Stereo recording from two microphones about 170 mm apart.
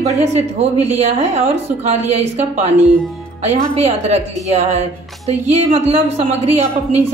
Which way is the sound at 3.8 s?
40° right (ahead or behind).